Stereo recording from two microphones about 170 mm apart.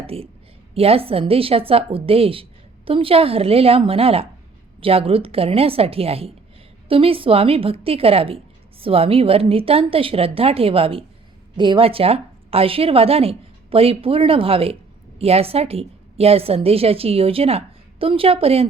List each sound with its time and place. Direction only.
0.1 s a woman's voice: 35° right (ahead or behind)